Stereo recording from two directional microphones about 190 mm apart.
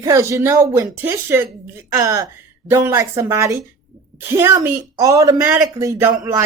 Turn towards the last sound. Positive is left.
turn(degrees=-15)  # may be behind; listen again after turning